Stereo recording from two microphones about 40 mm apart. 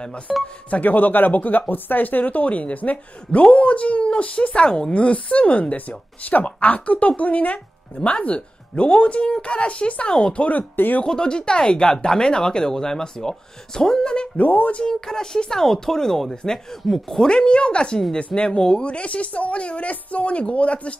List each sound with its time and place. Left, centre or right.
0.3 s speech: centre
0.7 s speech: left
4.9 s speech: left
11.1 s speech: centre
14.3 s speech: left
14.8 s speech: centre
17.3 s speech: left
18.9 s speech: left